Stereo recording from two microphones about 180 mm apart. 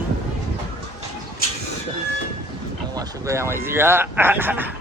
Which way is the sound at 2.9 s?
20° right (ahead or behind).